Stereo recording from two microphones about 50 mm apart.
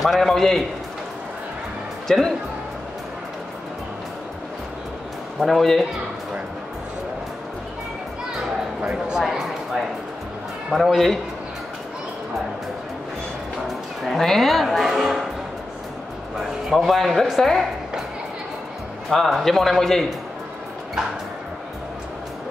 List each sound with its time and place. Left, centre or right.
0.0 s a man's voice: centre
2.0 s speech: centre
5.4 s a woman's voice: centre
8.8 s speech: centre
9.2 s a sound: centre
10.7 s a woman's voice: centre
14.0 s a woman's voice: centre
16.3 s a woman's voice: centre
19.0 s a woman's voice: centre